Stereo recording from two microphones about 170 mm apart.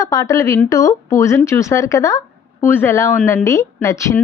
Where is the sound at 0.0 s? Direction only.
20° left (ahead or behind).